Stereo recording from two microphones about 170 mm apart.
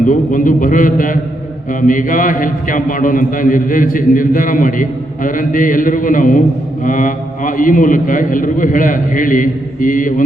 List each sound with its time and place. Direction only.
0.0 s a man's voice: 50° left (ahead or behind)